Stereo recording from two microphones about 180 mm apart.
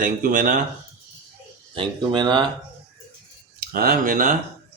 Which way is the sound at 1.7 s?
25° right (ahead or behind).